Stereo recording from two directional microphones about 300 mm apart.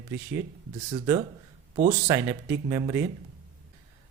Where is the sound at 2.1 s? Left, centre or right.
Centre.